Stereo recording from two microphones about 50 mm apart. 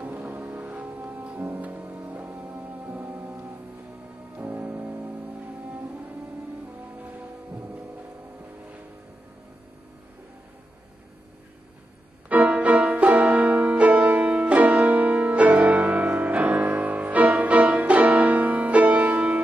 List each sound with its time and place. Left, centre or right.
0.4 s music: right
1.3 s music: right
4.4 s music: right
12.3 s music: right